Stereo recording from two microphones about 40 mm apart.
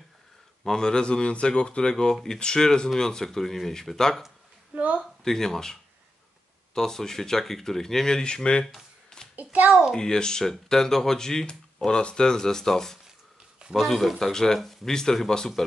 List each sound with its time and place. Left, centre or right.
0.7 s speech: centre
4.7 s a woman's voice: right
5.2 s speech: centre
8.2 s speech: left
9.3 s a child's voice: right
9.9 s speech: centre